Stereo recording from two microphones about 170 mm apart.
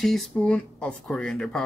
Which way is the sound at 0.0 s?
Centre (ahead or behind).